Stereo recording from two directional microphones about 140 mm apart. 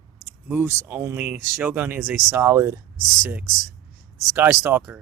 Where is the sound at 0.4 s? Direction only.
10° right (ahead or behind).